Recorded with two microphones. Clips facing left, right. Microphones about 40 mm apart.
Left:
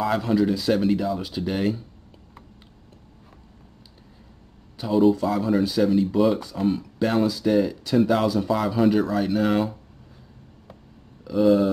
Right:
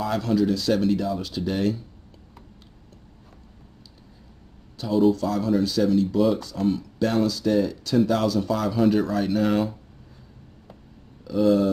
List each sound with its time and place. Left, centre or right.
0.0 s speech: centre
4.7 s speech: centre
11.2 s speech: centre